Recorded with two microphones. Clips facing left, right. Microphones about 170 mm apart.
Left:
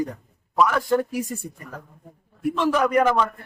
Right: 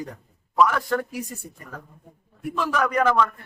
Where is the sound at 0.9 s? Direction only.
15° left (ahead or behind).